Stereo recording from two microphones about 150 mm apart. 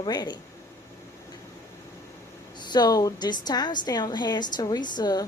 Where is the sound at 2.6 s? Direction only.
30° left (ahead or behind).